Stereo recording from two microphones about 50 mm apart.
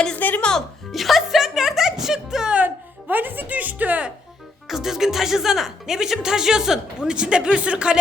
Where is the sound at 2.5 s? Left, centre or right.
Right.